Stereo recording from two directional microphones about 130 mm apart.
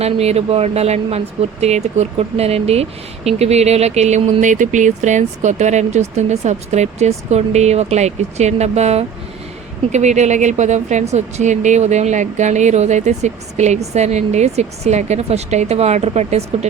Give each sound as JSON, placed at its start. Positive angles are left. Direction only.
{"t": 0.0, "sound": "a woman's voice", "side_deg": -55}